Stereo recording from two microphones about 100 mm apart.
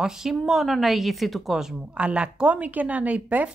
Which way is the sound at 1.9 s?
10° right (ahead or behind).